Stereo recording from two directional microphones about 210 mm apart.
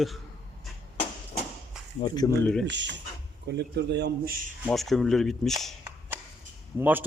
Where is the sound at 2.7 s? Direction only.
55° right (ahead or behind).